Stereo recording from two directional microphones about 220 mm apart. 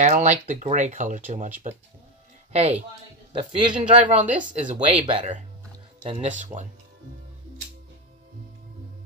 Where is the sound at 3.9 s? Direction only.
35° right (ahead or behind).